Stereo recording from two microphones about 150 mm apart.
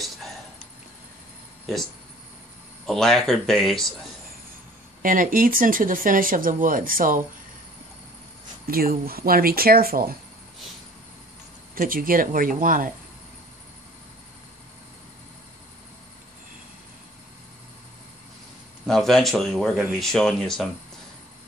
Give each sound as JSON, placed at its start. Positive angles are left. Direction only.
{"t": 2.9, "sound": "speech", "side_deg": 0}
{"t": 5.0, "sound": "speech", "side_deg": -65}
{"t": 8.6, "sound": "speech", "side_deg": -80}
{"t": 11.7, "sound": "speech", "side_deg": -70}
{"t": 18.9, "sound": "speech", "side_deg": 5}